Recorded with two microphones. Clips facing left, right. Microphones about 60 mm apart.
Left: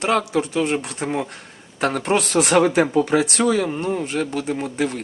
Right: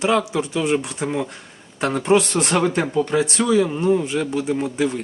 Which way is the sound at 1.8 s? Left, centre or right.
Left.